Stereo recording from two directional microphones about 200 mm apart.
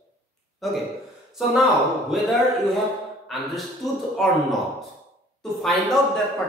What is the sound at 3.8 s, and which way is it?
Speech, 15° left (ahead or behind).